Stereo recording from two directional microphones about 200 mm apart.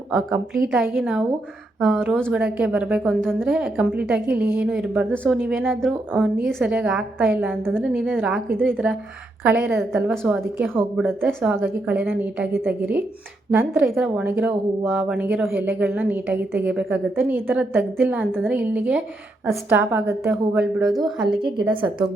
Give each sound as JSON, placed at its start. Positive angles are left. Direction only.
{"t": 0.1, "sound": "a woman's voice", "side_deg": 0}
{"t": 5.1, "sound": "a woman's voice", "side_deg": 5}
{"t": 21.4, "sound": "a woman's voice", "side_deg": -25}